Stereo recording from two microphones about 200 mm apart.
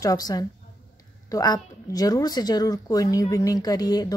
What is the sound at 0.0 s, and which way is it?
A woman's voice, 20° left (ahead or behind).